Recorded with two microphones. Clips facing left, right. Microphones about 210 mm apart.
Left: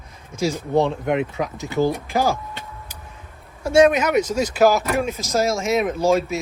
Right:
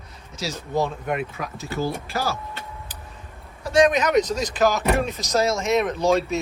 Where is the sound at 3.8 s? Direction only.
10° left (ahead or behind).